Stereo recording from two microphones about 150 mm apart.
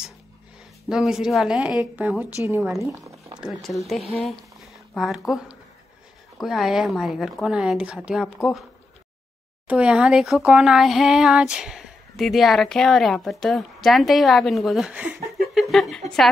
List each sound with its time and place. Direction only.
0.8 s speech: 5° right (ahead or behind); by 3.1 s 20° right (ahead or behind)
3.3 s speech: centre (ahead or behind)
9.7 s speech: 5° right (ahead or behind)
15.5 s a sound: centre (ahead or behind)